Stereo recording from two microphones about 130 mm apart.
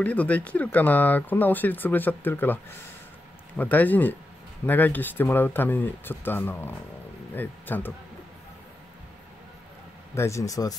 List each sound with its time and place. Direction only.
0.0 s speech: 10° left (ahead or behind)
10.1 s speech: 20° left (ahead or behind)